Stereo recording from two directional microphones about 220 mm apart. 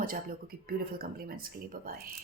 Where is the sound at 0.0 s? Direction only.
40° right (ahead or behind).